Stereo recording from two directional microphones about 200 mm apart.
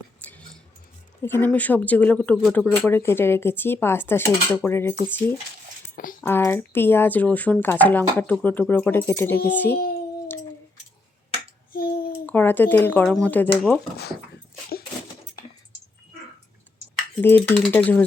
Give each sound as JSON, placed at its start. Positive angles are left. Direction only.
{"t": 0.2, "sound": "a sound", "side_deg": 5}
{"t": 1.2, "sound": "speech", "side_deg": 10}
{"t": 6.2, "sound": "speech", "side_deg": 10}
{"t": 11.7, "sound": "a sound", "side_deg": 50}
{"t": 12.2, "sound": "speech", "side_deg": 10}
{"t": 16.9, "sound": "speech", "side_deg": 5}